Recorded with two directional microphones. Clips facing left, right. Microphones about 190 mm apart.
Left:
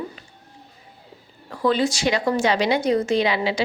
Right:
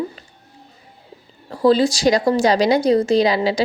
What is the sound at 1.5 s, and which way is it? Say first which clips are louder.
A woman's voice: right 6 dB; 35° right (ahead or behind).